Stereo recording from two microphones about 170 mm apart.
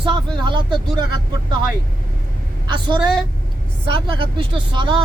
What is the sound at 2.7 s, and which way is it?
Speech, 25° right (ahead or behind).